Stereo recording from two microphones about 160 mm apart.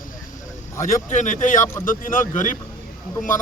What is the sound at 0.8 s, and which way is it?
Speech, 50° left (ahead or behind).